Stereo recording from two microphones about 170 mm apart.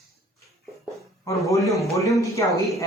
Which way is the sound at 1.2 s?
20° left (ahead or behind).